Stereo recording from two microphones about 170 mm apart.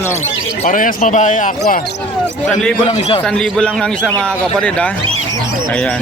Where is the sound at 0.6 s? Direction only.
50° left (ahead or behind).